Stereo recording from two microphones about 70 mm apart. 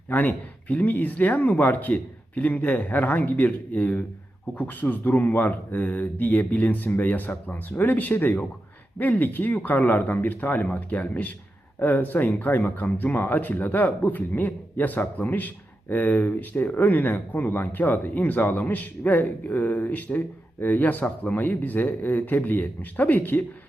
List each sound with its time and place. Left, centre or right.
0.1 s speech: left